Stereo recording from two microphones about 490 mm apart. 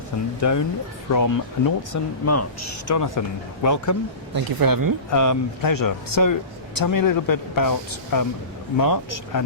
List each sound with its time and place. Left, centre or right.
0.3 s speech: left
4.4 s speech: right
5.1 s speech: left